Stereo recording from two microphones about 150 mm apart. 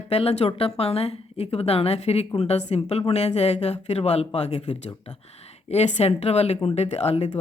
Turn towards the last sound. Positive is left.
turn(degrees=45)  # may be behind; listen again after turning